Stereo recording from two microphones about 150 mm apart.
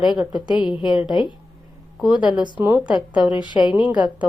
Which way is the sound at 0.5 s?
30° left (ahead or behind).